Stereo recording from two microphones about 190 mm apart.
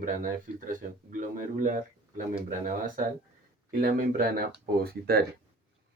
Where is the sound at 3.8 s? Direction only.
50° right (ahead or behind).